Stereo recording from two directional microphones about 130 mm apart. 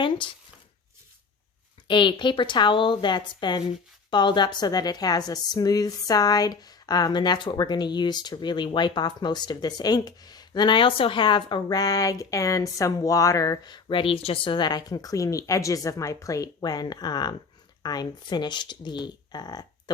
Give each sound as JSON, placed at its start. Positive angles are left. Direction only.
{"t": 1.9, "sound": "a woman's voice", "side_deg": 40}